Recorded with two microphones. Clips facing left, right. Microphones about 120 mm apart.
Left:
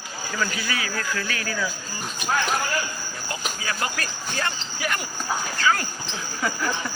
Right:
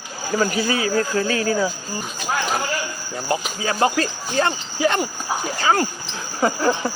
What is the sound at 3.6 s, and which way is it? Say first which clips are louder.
Speech: right 11 dB; 25° right (ahead or behind).